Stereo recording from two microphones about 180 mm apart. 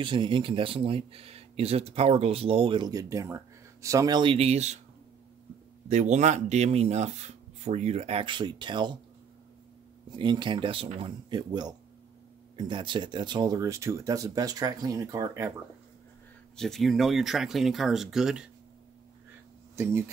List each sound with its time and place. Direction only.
0.0 s speech: 25° right (ahead or behind)
5.9 s speech: 40° right (ahead or behind); by 8.9 s 25° right (ahead or behind)
10.1 s speech: 25° right (ahead or behind)
16.5 s speech: centre (ahead or behind)
19.7 s speech: 15° right (ahead or behind)